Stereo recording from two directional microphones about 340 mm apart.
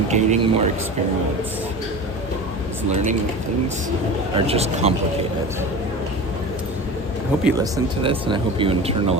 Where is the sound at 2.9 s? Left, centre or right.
Centre.